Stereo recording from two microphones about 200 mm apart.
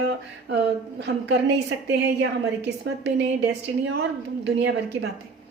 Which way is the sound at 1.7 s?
60° right (ahead or behind).